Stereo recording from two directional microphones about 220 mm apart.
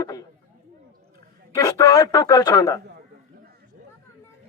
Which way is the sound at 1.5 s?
15° left (ahead or behind).